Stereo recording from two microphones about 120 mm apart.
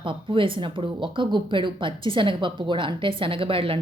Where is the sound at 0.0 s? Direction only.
45° right (ahead or behind).